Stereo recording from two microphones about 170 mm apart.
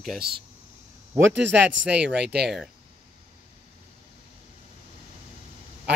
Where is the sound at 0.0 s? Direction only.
Centre (ahead or behind).